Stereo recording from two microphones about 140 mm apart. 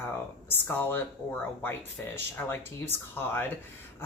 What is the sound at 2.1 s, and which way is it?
Speech, 15° left (ahead or behind).